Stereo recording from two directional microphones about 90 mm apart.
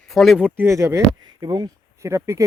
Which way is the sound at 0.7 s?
35° right (ahead or behind).